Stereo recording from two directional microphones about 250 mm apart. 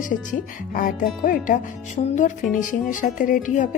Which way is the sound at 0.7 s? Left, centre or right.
Left.